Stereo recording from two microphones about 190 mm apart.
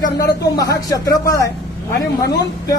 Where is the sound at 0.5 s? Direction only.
20° left (ahead or behind).